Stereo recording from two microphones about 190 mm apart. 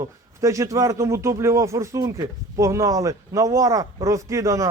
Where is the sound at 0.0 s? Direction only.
15° right (ahead or behind).